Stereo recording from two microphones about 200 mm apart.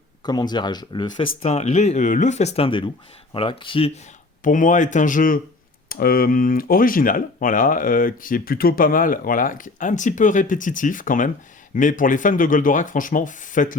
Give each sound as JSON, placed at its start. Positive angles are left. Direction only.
{"t": 0.2, "sound": "speech", "side_deg": 20}
{"t": 1.4, "sound": "speech", "side_deg": 35}
{"t": 4.4, "sound": "speech", "side_deg": 40}